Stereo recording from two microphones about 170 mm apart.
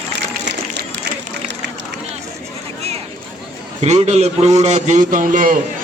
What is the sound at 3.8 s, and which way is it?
A man's voice, 40° right (ahead or behind).